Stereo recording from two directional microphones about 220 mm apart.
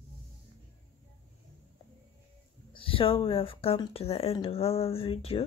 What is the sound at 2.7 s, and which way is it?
Speech, 25° left (ahead or behind).